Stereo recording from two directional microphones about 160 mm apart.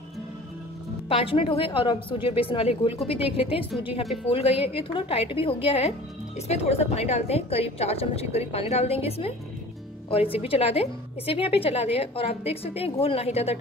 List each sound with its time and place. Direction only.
1.0 s a woman's voice: 35° left (ahead or behind)
10.3 s a woman's voice: 35° left (ahead or behind)